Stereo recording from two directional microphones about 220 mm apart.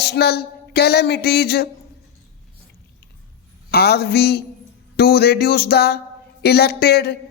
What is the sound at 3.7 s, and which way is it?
Speech, 45° left (ahead or behind).